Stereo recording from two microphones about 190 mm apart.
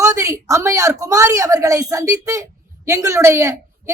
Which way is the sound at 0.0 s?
15° right (ahead or behind).